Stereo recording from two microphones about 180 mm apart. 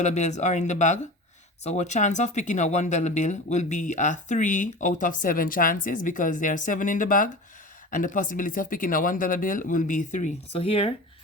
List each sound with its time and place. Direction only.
0.0 s speech: 40° left (ahead or behind)